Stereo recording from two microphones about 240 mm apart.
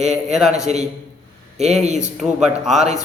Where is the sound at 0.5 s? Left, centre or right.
Right.